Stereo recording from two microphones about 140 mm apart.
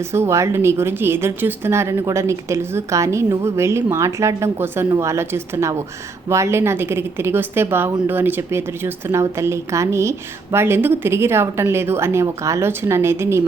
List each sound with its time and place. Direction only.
0.1 s speech: 20° right (ahead or behind)